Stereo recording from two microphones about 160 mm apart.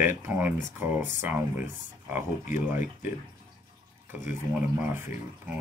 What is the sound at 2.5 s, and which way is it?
Speech, 50° left (ahead or behind).